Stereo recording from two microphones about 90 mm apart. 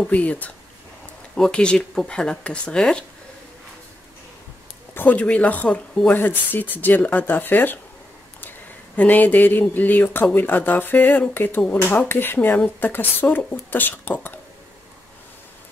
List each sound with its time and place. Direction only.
0.1 s speech: 15° left (ahead or behind)
4.9 s speech: 20° left (ahead or behind)